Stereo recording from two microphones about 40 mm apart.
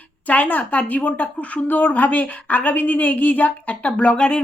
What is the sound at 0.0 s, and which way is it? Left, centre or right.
A woman's voice, left.